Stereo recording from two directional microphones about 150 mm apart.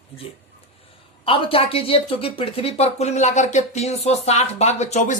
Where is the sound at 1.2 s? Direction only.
35° left (ahead or behind).